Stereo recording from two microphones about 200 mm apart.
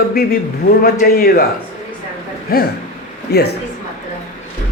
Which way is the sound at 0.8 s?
50° left (ahead or behind).